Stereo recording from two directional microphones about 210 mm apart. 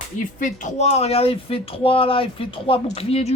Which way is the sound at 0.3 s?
35° left (ahead or behind).